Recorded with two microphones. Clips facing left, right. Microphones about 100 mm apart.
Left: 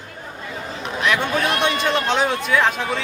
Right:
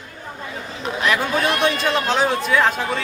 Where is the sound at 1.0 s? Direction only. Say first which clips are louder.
Even; centre (ahead or behind).